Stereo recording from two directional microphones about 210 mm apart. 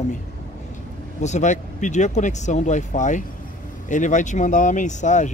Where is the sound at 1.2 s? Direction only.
35° left (ahead or behind).